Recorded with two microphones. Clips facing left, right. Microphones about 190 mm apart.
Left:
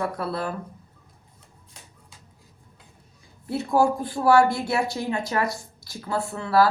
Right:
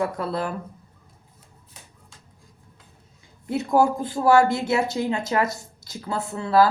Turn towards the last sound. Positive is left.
turn(degrees=-20)  # may be behind; listen again after turning